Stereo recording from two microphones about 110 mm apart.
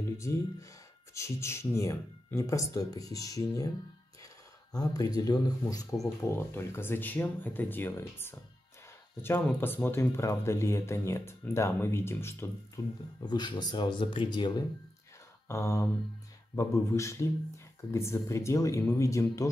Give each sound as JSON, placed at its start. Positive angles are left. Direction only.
{"t": 0.2, "sound": "speech", "side_deg": 25}
{"t": 4.7, "sound": "speech", "side_deg": 35}
{"t": 13.2, "sound": "speech", "side_deg": 40}
{"t": 15.4, "sound": "speech", "side_deg": 25}